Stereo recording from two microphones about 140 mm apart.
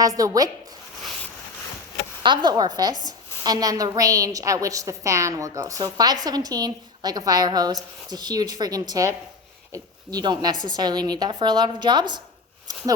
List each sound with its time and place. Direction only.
0.0 s a woman's voice: 25° right (ahead or behind)
2.2 s a woman's voice: 35° right (ahead or behind)
12.7 s a sound: 25° right (ahead or behind)